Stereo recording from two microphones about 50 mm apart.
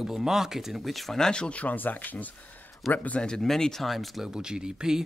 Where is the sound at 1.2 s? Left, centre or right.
Centre; by 3.2 s left.